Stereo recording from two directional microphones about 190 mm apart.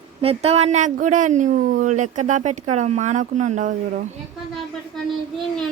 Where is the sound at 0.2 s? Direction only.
30° right (ahead or behind).